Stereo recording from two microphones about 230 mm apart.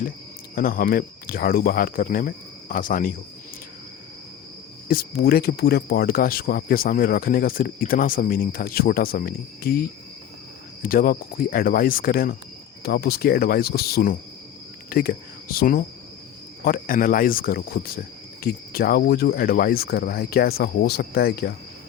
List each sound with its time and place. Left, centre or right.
0.5 s speech: left
4.9 s speech: left
10.8 s speech: left